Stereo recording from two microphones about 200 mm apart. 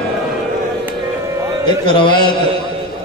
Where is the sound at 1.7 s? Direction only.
25° left (ahead or behind).